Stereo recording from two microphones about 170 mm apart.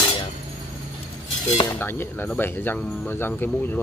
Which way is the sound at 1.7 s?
15° left (ahead or behind).